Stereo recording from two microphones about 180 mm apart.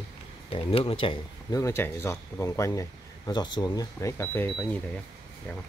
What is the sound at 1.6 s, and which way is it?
Speech, 15° left (ahead or behind).